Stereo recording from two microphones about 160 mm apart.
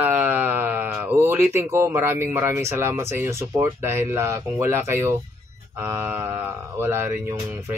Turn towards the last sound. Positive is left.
turn(degrees=-15)  # may be behind; listen again after turning